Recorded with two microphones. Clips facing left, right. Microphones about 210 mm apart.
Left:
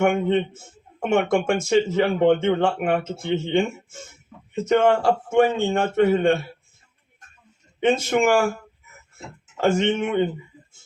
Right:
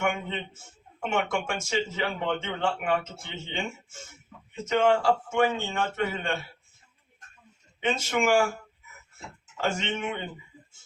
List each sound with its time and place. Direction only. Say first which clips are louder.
0.0 s speech: left 10 dB; 55° left (ahead or behind)
4.6 s speech: left 5 dB; 55° left (ahead or behind)
7.8 s speech: left 8 dB; 55° left (ahead or behind)
9.6 s speech: left 9 dB; 55° left (ahead or behind)